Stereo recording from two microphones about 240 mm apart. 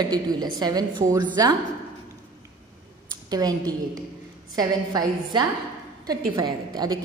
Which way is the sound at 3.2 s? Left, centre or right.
Centre.